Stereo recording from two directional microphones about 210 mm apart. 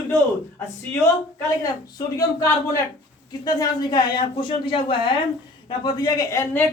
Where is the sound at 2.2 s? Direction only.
15° left (ahead or behind).